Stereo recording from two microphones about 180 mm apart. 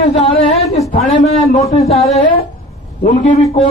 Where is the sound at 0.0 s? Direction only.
40° left (ahead or behind).